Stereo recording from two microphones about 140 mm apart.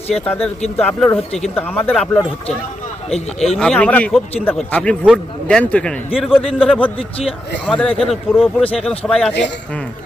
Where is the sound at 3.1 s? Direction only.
50° left (ahead or behind).